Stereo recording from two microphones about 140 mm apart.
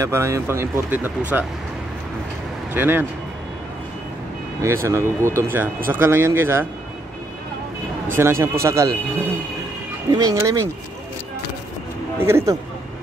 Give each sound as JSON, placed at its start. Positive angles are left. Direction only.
{"t": 0.0, "sound": "speech", "side_deg": -20}
{"t": 2.7, "sound": "speech", "side_deg": -15}
{"t": 4.8, "sound": "speech", "side_deg": -20}
{"t": 8.2, "sound": "speech", "side_deg": -20}
{"t": 10.1, "sound": "speech", "side_deg": -25}
{"t": 12.2, "sound": "speech", "side_deg": -20}